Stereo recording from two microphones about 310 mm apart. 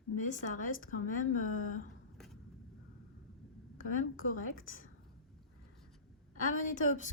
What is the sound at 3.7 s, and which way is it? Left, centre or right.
A woman's voice, left.